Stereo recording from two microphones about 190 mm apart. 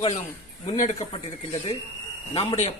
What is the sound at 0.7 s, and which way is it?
A man's voice, 40° left (ahead or behind).